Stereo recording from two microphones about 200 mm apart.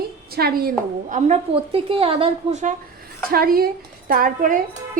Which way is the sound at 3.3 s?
50° right (ahead or behind).